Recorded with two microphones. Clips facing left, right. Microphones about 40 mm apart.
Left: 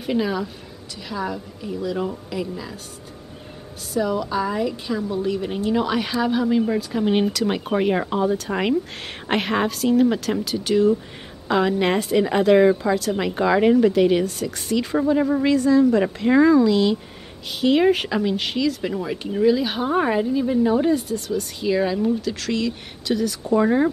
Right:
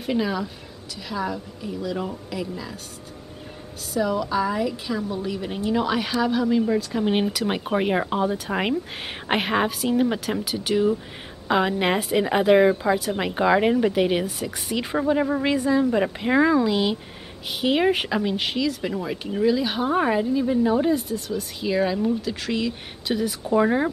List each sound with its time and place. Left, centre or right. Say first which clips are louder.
0.0 s speech: left 2 dB; centre
3.9 s a woman's voice: left 1 dB; centre